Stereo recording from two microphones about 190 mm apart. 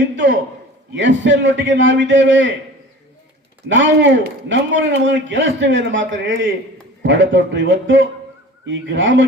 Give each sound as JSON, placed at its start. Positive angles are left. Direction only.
{"t": 0.9, "sound": "a man's voice", "side_deg": -70}
{"t": 3.7, "sound": "a man's voice", "side_deg": -75}